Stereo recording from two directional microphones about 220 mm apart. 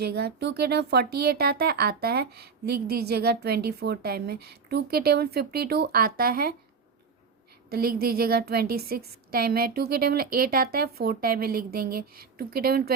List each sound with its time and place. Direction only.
0.0 s speech: 45° right (ahead or behind)
7.7 s speech: 45° right (ahead or behind)